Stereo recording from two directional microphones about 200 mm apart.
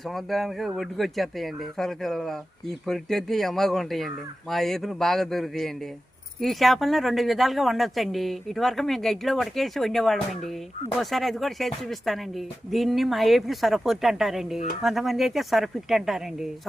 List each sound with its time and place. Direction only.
0.1 s speech: centre (ahead or behind)